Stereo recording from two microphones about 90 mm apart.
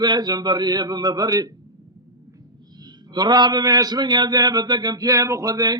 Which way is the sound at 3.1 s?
50° right (ahead or behind).